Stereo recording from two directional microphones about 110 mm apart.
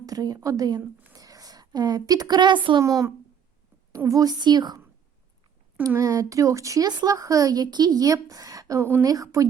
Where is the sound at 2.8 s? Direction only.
30° right (ahead or behind).